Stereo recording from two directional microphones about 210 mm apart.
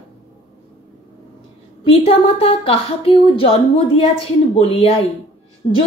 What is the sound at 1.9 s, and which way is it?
Speech, 25° left (ahead or behind).